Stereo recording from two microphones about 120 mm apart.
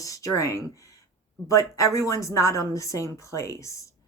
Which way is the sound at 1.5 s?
25° left (ahead or behind).